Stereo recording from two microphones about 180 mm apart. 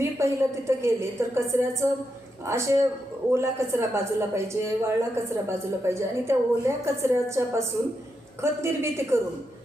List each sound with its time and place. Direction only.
0.0 s a man's voice: 15° right (ahead or behind)